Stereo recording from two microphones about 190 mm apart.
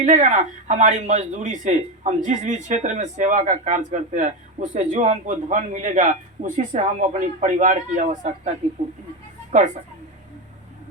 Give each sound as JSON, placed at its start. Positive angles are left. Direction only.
{"t": 0.0, "sound": "speech", "side_deg": -40}